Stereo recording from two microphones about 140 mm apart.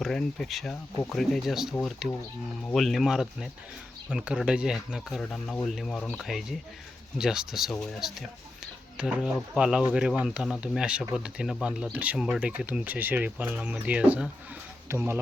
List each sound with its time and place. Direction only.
0.0 s speech: 5° left (ahead or behind)
2.7 s speech: centre (ahead or behind); by 15.2 s 15° right (ahead or behind)